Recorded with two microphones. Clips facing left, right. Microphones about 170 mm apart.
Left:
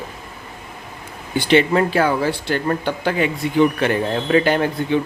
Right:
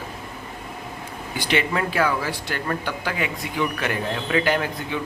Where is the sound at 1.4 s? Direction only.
30° left (ahead or behind).